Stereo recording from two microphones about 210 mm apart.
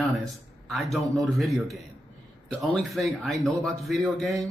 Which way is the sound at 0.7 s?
Centre (ahead or behind).